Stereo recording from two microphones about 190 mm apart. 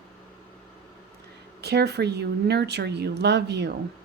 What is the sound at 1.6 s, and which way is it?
A woman's voice, 60° right (ahead or behind).